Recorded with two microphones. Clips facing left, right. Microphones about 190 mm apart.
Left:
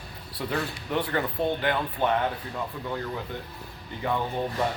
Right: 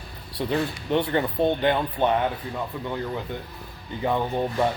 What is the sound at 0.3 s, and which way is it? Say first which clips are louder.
Speech: right 5 dB; 25° right (ahead or behind).